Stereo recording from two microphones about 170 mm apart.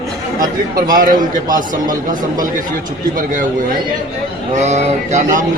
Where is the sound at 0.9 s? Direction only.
50° right (ahead or behind).